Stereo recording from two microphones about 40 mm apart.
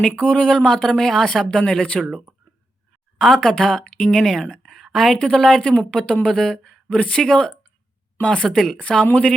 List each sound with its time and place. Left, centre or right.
0.2 s speech: left
0.4 s speech: centre
3.2 s a woman's voice: centre
4.6 s a sound: centre
5.2 s a woman's voice: centre
5.7 s a woman's voice: left